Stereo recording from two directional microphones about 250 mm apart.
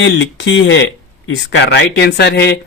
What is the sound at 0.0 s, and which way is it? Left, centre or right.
Speech, left.